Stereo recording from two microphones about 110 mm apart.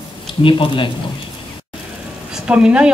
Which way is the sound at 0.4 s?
50° left (ahead or behind).